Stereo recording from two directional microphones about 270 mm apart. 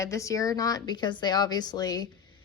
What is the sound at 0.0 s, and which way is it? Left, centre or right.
A woman's voice, centre.